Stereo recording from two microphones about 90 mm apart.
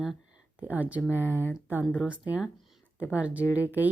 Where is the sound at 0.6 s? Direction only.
15° right (ahead or behind).